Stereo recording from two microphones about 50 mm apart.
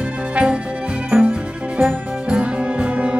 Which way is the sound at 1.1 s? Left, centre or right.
Right.